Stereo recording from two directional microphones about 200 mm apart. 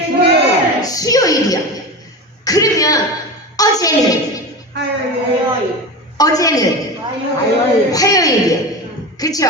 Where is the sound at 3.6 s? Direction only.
20° left (ahead or behind).